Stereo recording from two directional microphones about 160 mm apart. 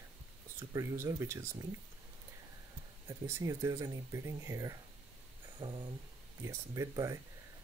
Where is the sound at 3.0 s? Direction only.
20° right (ahead or behind).